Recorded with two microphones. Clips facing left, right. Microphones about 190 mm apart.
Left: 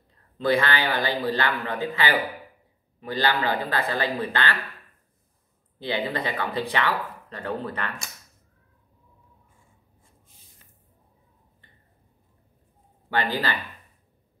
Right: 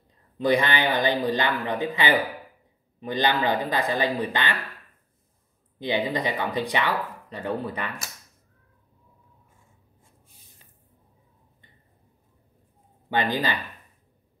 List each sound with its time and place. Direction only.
0.4 s speech: 15° right (ahead or behind)
5.8 s speech: 15° right (ahead or behind)
13.1 s speech: 15° right (ahead or behind)